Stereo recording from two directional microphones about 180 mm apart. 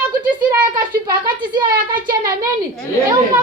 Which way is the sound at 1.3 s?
25° right (ahead or behind).